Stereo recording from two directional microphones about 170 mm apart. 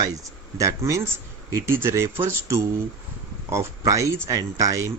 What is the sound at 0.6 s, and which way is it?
Speech, 20° right (ahead or behind).